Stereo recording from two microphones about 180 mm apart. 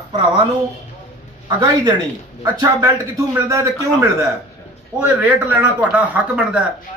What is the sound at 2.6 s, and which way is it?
Speech, 20° right (ahead or behind).